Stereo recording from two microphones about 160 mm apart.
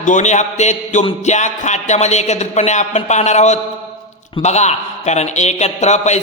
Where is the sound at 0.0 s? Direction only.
50° left (ahead or behind).